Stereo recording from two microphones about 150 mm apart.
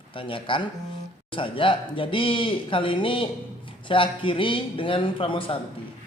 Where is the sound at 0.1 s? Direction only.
35° left (ahead or behind).